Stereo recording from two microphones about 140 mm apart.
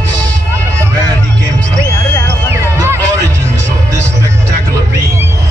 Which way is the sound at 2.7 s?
20° right (ahead or behind).